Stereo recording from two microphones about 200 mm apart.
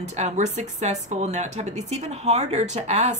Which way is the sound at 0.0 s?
35° right (ahead or behind).